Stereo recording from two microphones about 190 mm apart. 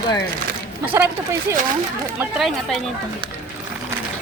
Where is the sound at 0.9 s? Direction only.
15° right (ahead or behind).